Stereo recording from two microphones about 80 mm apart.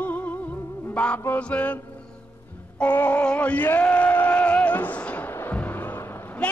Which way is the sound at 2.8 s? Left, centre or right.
Left.